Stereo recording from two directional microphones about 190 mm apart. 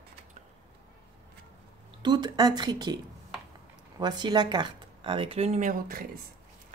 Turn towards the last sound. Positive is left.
turn(degrees=-45)  # may be behind; listen again after turning